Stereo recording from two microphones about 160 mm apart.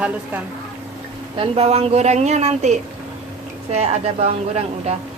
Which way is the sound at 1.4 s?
40° right (ahead or behind).